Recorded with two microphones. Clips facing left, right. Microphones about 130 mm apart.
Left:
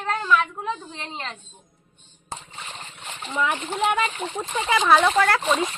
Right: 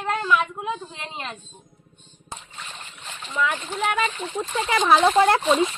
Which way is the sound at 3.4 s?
20° left (ahead or behind).